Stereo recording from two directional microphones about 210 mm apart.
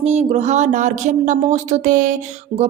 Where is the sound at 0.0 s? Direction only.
30° right (ahead or behind).